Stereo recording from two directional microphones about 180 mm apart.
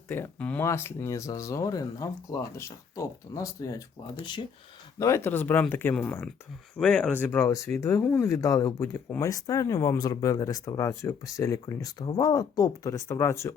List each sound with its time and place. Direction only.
0.1 s speech: 10° left (ahead or behind)